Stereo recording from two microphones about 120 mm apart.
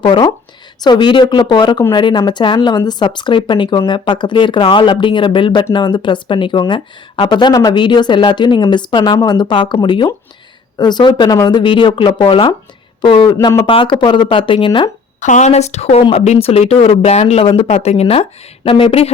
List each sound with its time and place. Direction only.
0.0 s speech: 40° left (ahead or behind)
13.7 s speech: 45° left (ahead or behind)
15.2 s speech: 85° left; by 17.4 s 65° left (ahead or behind)
17.4 s speech: 45° left (ahead or behind)
17.7 s speech: 60° left (ahead or behind)